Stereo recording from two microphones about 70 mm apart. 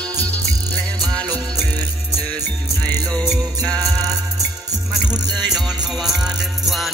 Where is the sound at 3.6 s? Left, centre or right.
Right.